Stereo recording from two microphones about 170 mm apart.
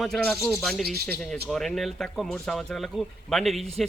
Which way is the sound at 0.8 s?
65° right (ahead or behind).